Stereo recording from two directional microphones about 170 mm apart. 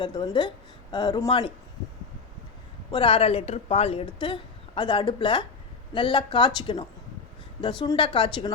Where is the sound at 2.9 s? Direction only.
30° left (ahead or behind).